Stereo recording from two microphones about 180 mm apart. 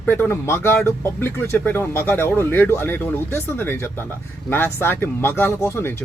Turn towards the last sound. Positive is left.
turn(degrees=15)  # may be behind; listen again after turning